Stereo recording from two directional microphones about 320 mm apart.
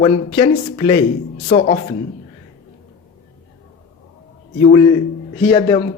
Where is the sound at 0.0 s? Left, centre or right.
Centre.